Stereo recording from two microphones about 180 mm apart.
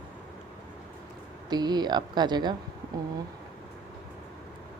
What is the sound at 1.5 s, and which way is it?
A woman's voice, 25° right (ahead or behind).